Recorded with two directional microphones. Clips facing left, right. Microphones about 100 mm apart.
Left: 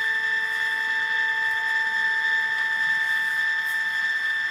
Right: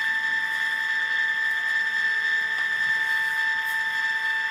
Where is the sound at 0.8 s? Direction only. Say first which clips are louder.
Left 1 dB; 15° left (ahead or behind).